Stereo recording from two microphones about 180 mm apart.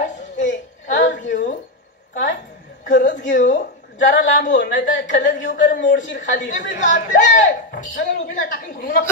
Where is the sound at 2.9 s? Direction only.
45° left (ahead or behind).